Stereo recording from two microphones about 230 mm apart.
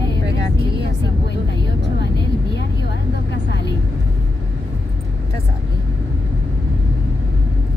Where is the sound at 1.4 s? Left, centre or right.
Left.